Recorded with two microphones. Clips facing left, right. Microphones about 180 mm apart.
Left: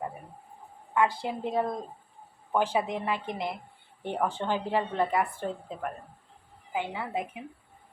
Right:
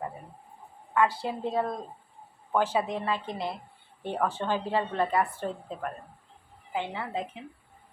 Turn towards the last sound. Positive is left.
turn(degrees=10)  # may be behind; listen again after turning